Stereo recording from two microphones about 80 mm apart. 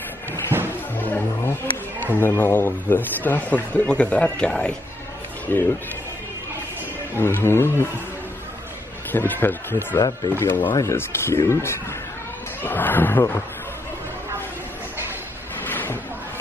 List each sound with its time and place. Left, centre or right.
0.5 s music: right
0.9 s music: left
2.1 s speech: left; by 4.7 s centre
5.5 s speech: left
7.2 s speech: left
9.1 s speech: left
9.9 s speech: left
10.3 s speech: left
12.6 s speech: left
15.6 s a sound: left